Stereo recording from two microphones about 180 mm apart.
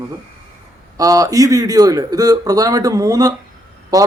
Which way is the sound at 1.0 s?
20° right (ahead or behind).